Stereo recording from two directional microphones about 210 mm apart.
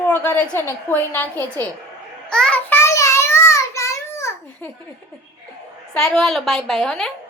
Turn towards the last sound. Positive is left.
turn(degrees=0)  # may be behind; listen again after turning